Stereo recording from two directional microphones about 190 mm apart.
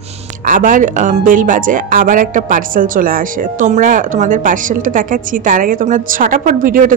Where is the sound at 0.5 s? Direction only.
45° right (ahead or behind).